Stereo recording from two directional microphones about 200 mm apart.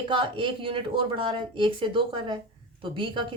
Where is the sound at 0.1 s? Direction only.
25° right (ahead or behind).